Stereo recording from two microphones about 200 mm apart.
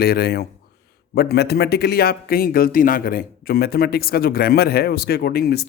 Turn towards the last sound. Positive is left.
turn(degrees=50)  # may be behind; listen again after turning